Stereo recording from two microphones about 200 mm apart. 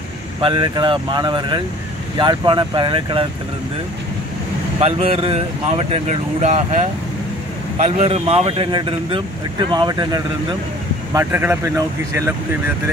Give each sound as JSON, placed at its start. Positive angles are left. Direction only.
{"t": 0.4, "sound": "speech", "side_deg": -25}
{"t": 4.7, "sound": "speech", "side_deg": -30}